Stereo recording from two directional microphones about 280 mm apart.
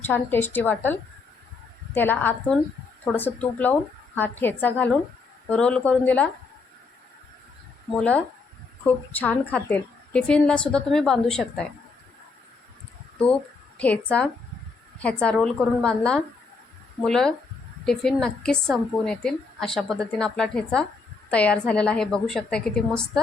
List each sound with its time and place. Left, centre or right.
0.1 s a woman's voice: centre
7.9 s a woman's voice: centre
13.7 s a woman's voice: centre